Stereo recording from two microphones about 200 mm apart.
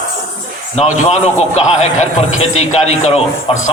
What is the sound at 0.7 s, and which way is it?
Speech, 30° left (ahead or behind).